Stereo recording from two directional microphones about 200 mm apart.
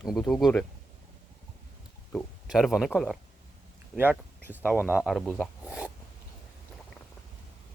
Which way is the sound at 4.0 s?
10° right (ahead or behind).